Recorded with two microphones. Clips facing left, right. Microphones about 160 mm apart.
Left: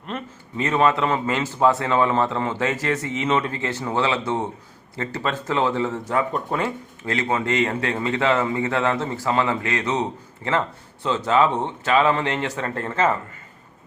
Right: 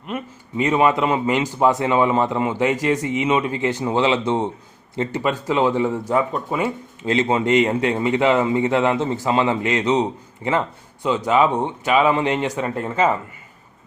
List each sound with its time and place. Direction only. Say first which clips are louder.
0.0 s a man's voice: right 3 dB; 10° right (ahead or behind)
7.0 s a man's voice: right 5 dB; 20° right (ahead or behind)